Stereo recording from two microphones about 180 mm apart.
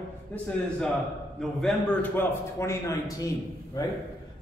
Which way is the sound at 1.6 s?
10° left (ahead or behind).